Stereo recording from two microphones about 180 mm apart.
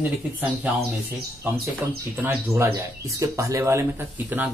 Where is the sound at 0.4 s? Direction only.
10° right (ahead or behind).